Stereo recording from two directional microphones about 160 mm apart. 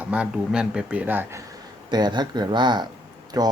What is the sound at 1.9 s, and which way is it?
Speech, 25° right (ahead or behind).